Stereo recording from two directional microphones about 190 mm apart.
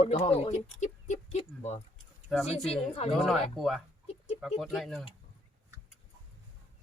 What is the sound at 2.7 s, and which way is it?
Speech, 35° left (ahead or behind).